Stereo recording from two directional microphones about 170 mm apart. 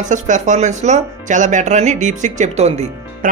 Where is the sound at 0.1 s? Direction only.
45° right (ahead or behind).